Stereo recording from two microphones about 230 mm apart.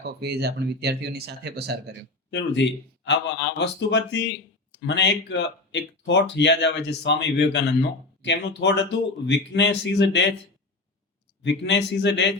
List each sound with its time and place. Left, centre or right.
0.0 s speech: right
2.3 s speech: left
11.4 s speech: left